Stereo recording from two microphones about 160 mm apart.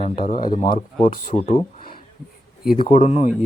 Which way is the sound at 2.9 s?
45° left (ahead or behind).